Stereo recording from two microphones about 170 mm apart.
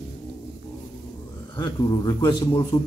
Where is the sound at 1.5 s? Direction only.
25° left (ahead or behind).